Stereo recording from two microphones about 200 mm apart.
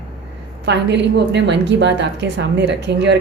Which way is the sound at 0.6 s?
60° right (ahead or behind).